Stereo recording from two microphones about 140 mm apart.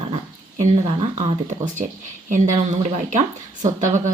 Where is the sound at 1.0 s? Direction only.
55° right (ahead or behind).